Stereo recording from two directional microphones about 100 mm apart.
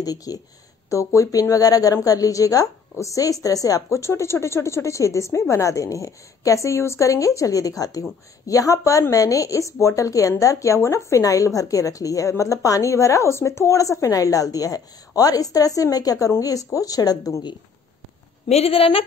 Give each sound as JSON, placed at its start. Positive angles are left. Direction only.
{"t": 0.0, "sound": "a woman's voice", "side_deg": 40}
{"t": 18.5, "sound": "speech", "side_deg": 80}